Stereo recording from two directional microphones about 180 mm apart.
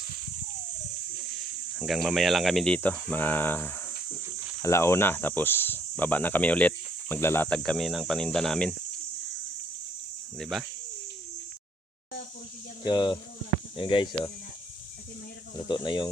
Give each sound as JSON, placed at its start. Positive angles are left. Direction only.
{"t": 1.8, "sound": "speech", "side_deg": 0}
{"t": 10.3, "sound": "speech", "side_deg": 0}
{"t": 12.8, "sound": "speech", "side_deg": 25}
{"t": 15.5, "sound": "speech", "side_deg": 25}